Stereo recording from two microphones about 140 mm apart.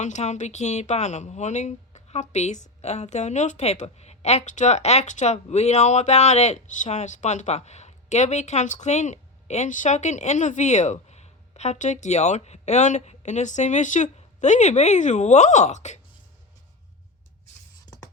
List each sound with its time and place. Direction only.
0.0 s speech: 55° left (ahead or behind)